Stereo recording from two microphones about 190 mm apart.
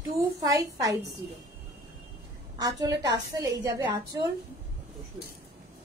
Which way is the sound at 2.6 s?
20° right (ahead or behind).